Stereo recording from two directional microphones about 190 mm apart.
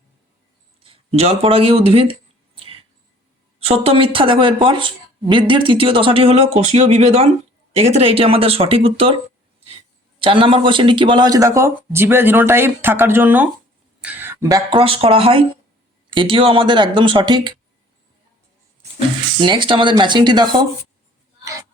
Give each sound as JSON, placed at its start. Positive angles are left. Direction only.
{"t": 0.8, "sound": "speech", "side_deg": -30}
{"t": 3.6, "sound": "speech", "side_deg": -30}
{"t": 10.2, "sound": "speech", "side_deg": -25}
{"t": 14.0, "sound": "a sound", "side_deg": -10}
{"t": 14.4, "sound": "speech", "side_deg": -20}
{"t": 18.9, "sound": "speech", "side_deg": -25}